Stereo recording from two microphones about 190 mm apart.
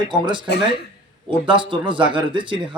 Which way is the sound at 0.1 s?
25° right (ahead or behind).